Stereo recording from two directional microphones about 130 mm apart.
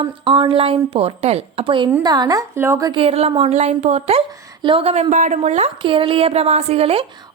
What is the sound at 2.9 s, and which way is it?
A woman's voice, 45° right (ahead or behind).